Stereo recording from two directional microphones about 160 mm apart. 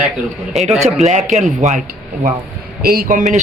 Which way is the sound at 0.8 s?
45° right (ahead or behind).